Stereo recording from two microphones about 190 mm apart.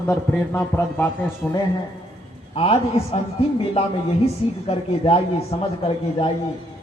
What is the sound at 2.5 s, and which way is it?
Speech, 30° left (ahead or behind).